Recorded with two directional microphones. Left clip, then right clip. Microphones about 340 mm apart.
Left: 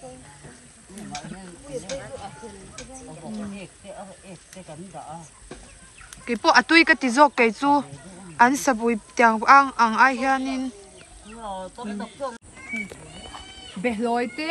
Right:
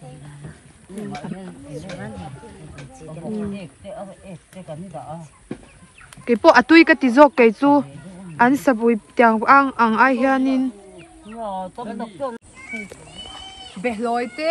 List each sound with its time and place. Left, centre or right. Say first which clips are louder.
6.2 s a woman's voice: right 5 dB; centre
11.7 s speech: right 4 dB; right
12.7 s a sound: left 1 dB; left
13.7 s a woman's voice: right 2 dB; centre